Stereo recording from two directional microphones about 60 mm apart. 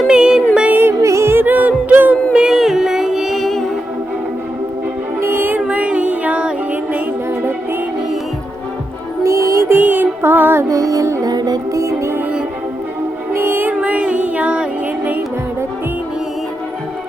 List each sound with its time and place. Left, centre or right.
0.1 s music: centre
0.7 s music: right
1.0 s music: right
1.3 s music: right
2.3 s music: centre
5.2 s music: right
5.5 s music: right
7.3 s music: right
9.2 s music: right
9.6 s music: right
10.7 s music: right
11.8 s music: right
13.3 s music: right
13.8 s music: right